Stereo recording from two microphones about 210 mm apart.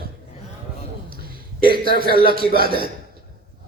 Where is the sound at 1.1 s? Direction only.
45° right (ahead or behind).